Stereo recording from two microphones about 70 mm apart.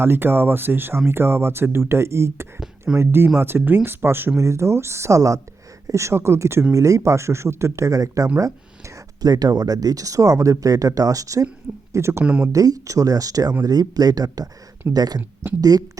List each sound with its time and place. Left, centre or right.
0.0 s speech: right
4.4 s speech: right
7.9 s speech: right
9.2 s speech: right
11.9 s speech: right
12.2 s speech: centre
12.5 s speech: right